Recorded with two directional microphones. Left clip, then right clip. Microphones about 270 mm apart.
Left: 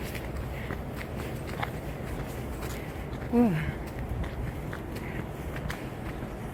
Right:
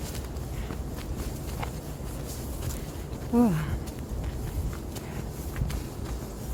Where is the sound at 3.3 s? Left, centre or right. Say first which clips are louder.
Right 1 dB; centre.